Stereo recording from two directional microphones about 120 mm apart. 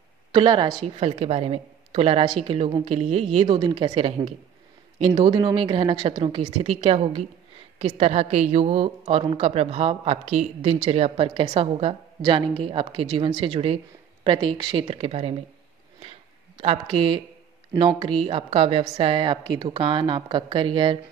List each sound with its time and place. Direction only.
0.3 s a woman's voice: 40° right (ahead or behind)
0.8 s speech: 55° right (ahead or behind)
4.9 s a woman's voice: 45° right (ahead or behind)
14.5 s a woman's voice: 40° right (ahead or behind)
14.9 s speech: 60° right (ahead or behind)
16.5 s a woman's voice: 55° right (ahead or behind)